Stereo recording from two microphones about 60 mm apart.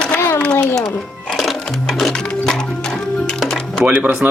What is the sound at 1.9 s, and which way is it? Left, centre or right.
Music, centre.